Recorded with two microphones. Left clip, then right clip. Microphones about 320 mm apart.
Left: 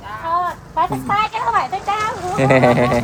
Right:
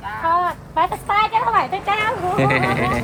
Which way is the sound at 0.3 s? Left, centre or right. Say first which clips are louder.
Right 1 dB; right.